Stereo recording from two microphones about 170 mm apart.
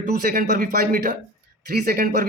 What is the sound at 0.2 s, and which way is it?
Speech, 55° right (ahead or behind).